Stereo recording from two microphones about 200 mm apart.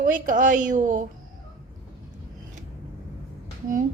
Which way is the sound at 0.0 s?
40° right (ahead or behind).